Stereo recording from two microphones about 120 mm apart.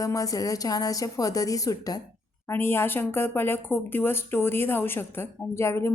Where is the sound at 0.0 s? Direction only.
30° left (ahead or behind).